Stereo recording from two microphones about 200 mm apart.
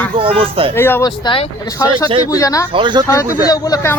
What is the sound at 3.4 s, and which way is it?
Speech, 20° left (ahead or behind).